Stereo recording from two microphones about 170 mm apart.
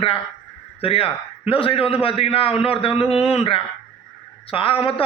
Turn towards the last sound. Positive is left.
turn(degrees=35)  # may be behind; listen again after turning